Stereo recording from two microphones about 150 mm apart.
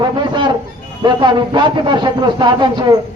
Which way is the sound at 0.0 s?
30° right (ahead or behind).